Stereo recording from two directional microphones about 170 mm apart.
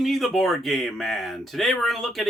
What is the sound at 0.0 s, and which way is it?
Speech, centre (ahead or behind).